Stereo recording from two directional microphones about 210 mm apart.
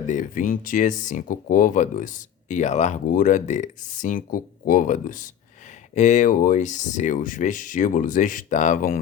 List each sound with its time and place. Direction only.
0.1 s speech: 40° left (ahead or behind)